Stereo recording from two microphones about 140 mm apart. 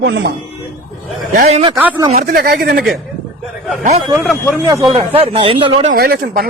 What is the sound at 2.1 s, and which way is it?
Speech, 90° right.